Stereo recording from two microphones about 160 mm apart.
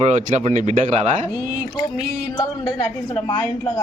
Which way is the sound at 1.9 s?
25° left (ahead or behind).